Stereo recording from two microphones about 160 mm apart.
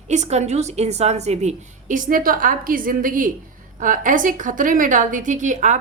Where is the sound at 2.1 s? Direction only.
60° right (ahead or behind).